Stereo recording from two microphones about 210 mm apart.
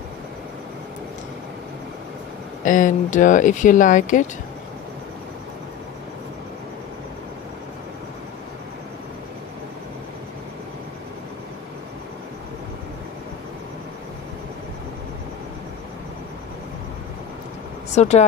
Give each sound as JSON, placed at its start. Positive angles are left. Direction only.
{"t": 2.6, "sound": "speech", "side_deg": 40}
{"t": 17.9, "sound": "speech", "side_deg": 35}